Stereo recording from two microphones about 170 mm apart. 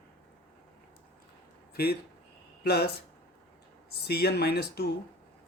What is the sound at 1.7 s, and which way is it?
Speech, 65° left (ahead or behind).